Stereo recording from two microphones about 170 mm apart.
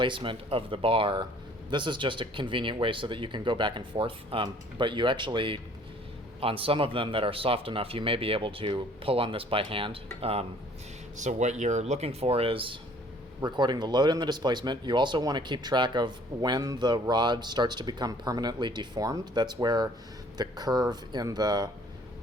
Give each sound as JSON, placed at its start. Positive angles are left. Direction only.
{"t": 0.0, "sound": "speech", "side_deg": -30}